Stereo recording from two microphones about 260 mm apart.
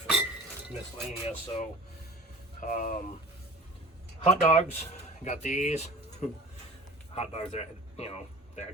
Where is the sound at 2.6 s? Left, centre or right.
Left.